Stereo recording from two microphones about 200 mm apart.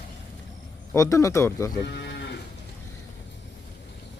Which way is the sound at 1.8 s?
60° left (ahead or behind).